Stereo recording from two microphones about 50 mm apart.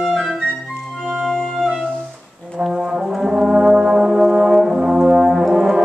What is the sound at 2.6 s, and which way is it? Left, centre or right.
Brass instrument, centre.